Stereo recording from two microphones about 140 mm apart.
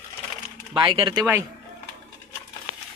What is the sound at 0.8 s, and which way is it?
Speech, 35° right (ahead or behind).